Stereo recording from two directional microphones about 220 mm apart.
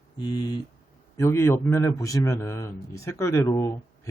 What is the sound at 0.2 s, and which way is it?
A man's voice, 15° left (ahead or behind).